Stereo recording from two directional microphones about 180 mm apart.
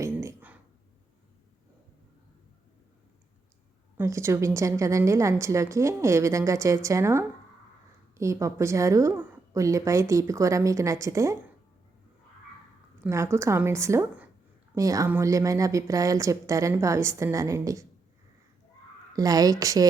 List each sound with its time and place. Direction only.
0.0 s a sound: 15° right (ahead or behind)
3.9 s a woman's voice: 15° right (ahead or behind)
13.1 s a woman's voice: 15° right (ahead or behind)
19.1 s speech: 20° right (ahead or behind)